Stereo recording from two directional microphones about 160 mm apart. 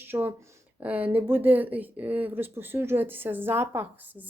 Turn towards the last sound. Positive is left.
turn(degrees=-15)  # may be behind; listen again after turning